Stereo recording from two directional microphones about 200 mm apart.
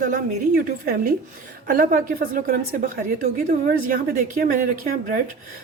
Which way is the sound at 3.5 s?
45° right (ahead or behind).